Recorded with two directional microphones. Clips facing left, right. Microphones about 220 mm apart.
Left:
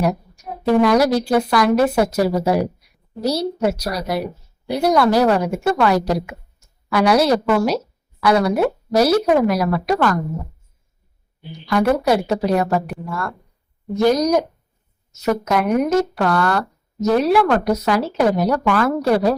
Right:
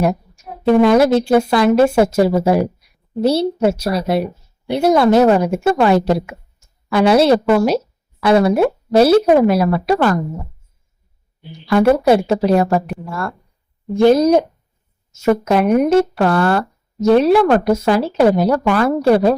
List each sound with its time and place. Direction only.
0.0 s speech: 25° right (ahead or behind)
11.6 s speech: 25° right (ahead or behind)